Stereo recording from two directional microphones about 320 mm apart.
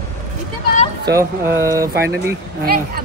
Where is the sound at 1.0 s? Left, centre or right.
Centre.